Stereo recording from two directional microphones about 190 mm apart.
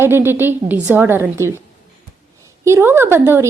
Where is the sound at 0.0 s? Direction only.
10° right (ahead or behind).